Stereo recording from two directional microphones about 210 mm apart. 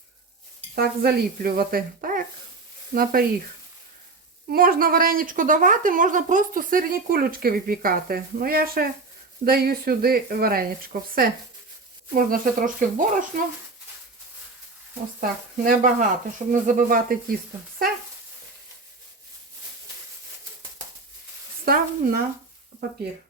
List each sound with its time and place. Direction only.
0.8 s a woman's voice: 45° right (ahead or behind)
4.4 s a woman's voice: 45° right (ahead or behind)
15.2 s speech: 40° right (ahead or behind)
21.6 s speech: 45° right (ahead or behind)